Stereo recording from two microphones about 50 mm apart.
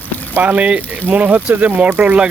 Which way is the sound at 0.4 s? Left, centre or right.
Right.